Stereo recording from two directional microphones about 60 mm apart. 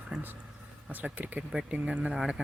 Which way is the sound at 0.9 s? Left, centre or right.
Right.